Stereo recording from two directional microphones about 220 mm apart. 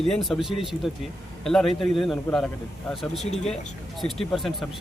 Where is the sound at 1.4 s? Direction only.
Centre (ahead or behind).